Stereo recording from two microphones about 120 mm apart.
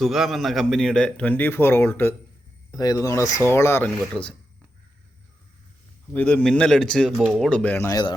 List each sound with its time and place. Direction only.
0.0 s a man's voice: centre (ahead or behind); by 2.1 s 20° left (ahead or behind)
2.7 s speech: 30° left (ahead or behind)
3.8 s a man's voice: 5° left (ahead or behind)
6.1 s a man's voice: 10° left (ahead or behind)
7.6 s a man's voice: 15° left (ahead or behind)
7.9 s a man's voice: 35° left (ahead or behind)